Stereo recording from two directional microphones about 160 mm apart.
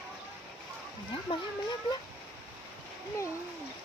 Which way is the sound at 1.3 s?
30° left (ahead or behind).